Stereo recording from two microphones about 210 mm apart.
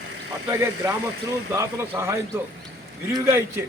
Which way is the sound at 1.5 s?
10° right (ahead or behind).